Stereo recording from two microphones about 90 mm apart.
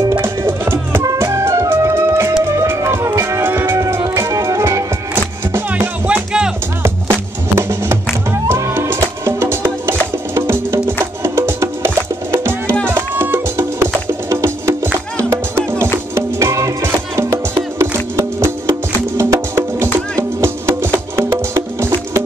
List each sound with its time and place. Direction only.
0.2 s music: 25° right (ahead or behind)
5.1 s music: 20° right (ahead or behind)
6.8 s music: 25° right (ahead or behind)